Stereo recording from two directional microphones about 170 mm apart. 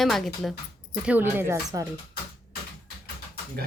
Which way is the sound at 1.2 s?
15° right (ahead or behind).